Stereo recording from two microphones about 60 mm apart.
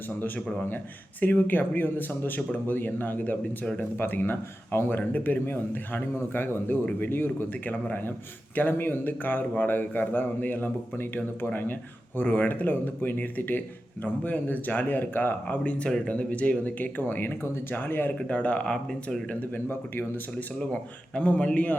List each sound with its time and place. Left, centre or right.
1.2 s speech: left
16.0 s speech: left
18.2 s speech: left
19.3 s speech: left
21.2 s speech: centre